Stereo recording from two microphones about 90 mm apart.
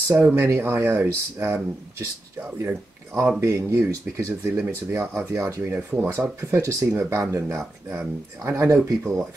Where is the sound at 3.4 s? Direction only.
30° right (ahead or behind).